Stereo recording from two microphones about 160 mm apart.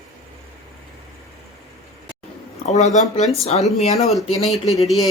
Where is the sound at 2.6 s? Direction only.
45° left (ahead or behind).